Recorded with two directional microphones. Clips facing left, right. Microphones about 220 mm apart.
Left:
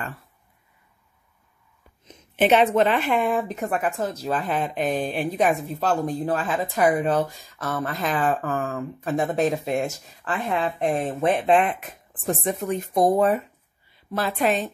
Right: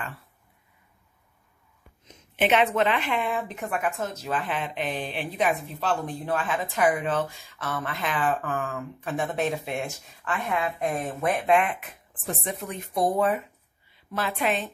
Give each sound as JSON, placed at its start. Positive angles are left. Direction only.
{"t": 2.3, "sound": "a woman's voice", "side_deg": 40}